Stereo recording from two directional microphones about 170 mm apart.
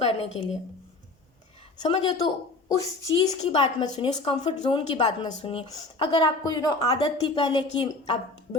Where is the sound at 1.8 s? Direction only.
30° left (ahead or behind).